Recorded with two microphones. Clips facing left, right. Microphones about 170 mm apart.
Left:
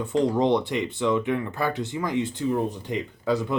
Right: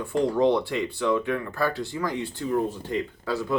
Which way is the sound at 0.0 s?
20° left (ahead or behind).